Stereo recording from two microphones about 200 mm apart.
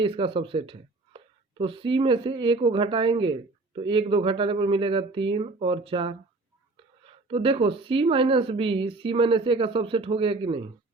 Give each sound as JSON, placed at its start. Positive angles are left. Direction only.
{"t": 0.0, "sound": "speech", "side_deg": -25}